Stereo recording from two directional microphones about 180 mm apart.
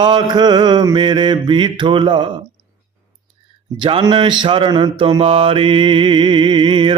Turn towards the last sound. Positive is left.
turn(degrees=-30)  # may be behind; listen again after turning